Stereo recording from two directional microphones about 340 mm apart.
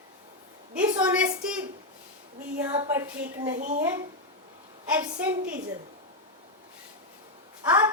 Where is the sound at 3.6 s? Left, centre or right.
Right.